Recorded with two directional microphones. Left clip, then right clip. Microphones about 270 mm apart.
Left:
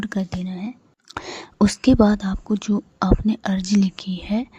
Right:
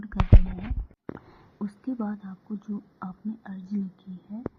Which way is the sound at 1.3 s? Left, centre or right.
Left.